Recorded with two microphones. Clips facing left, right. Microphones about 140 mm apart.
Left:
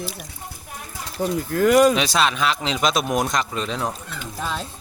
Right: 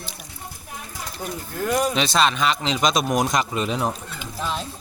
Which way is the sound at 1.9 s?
5° left (ahead or behind).